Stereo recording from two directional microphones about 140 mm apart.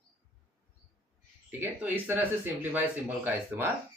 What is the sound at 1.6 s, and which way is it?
Speech, 15° right (ahead or behind).